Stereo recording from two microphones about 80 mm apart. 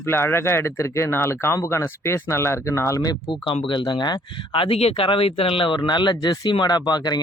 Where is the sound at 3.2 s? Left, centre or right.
Left.